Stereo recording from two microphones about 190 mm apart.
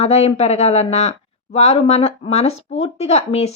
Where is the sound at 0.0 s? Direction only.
35° left (ahead or behind).